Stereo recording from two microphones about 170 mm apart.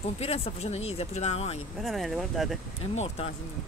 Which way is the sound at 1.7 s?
Centre (ahead or behind).